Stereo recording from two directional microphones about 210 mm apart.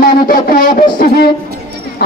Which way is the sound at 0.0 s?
45° left (ahead or behind).